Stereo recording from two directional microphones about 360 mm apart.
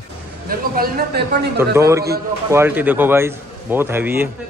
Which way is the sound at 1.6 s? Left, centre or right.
Centre.